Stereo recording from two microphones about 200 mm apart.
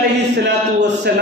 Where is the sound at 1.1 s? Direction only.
55° right (ahead or behind).